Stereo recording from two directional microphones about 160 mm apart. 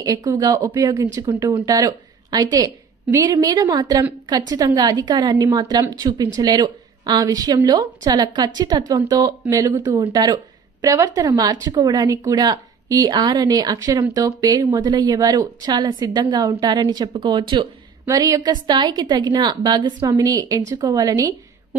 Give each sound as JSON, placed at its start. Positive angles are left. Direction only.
{"t": 0.0, "sound": "a woman's voice", "side_deg": -20}